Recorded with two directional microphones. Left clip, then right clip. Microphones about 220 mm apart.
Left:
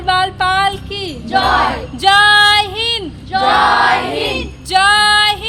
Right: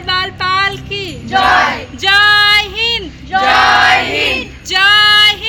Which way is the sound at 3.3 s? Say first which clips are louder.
Right 2 dB; 40° right (ahead or behind).